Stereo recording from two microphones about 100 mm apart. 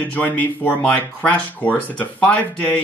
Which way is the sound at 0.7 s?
15° left (ahead or behind).